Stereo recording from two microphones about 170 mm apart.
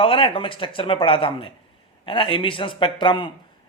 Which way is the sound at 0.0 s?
30° left (ahead or behind).